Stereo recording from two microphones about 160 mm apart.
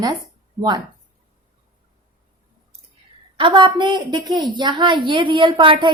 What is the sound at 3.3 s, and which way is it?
A woman's voice, 30° right (ahead or behind).